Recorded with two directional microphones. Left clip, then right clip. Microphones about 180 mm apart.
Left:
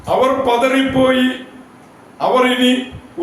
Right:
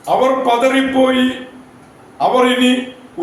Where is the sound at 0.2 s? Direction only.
10° right (ahead or behind).